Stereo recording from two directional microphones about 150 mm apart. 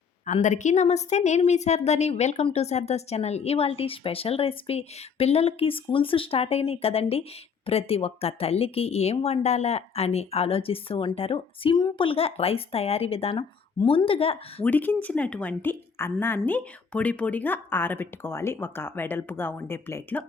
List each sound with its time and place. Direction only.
0.4 s a woman's voice: 55° left (ahead or behind)
14.6 s a woman's voice: 10° left (ahead or behind)